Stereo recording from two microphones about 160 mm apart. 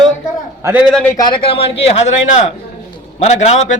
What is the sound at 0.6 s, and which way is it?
Speech, 15° right (ahead or behind).